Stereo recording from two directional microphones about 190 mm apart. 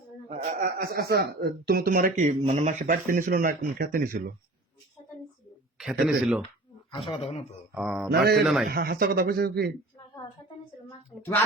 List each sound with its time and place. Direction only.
0.6 s speech: 50° right (ahead or behind)
5.7 s a man's voice: 5° right (ahead or behind)
6.9 s speech: 30° left (ahead or behind)
7.7 s speech: 5° right (ahead or behind)
8.1 s a man's voice: 60° right (ahead or behind)